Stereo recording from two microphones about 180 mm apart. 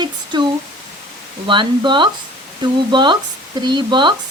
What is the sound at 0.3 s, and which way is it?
Speech, 25° right (ahead or behind).